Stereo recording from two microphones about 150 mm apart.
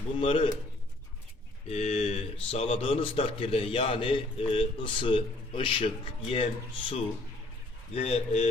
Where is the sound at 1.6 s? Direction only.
45° left (ahead or behind).